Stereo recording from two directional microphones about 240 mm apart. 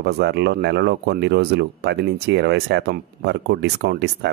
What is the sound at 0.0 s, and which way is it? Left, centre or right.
Speech, right.